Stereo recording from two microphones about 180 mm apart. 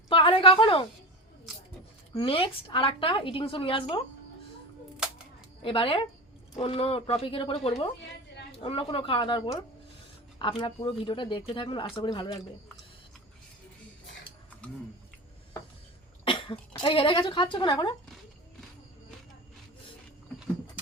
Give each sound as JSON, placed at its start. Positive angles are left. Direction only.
{"t": 0.1, "sound": "a woman's voice", "side_deg": 30}
{"t": 2.1, "sound": "speech", "side_deg": 30}
{"t": 5.6, "sound": "speech", "side_deg": 30}
{"t": 16.2, "sound": "speech", "side_deg": 30}